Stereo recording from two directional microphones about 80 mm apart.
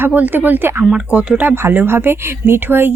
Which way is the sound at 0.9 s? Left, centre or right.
Centre.